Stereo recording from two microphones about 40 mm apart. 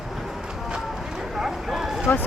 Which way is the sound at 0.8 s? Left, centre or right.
Centre.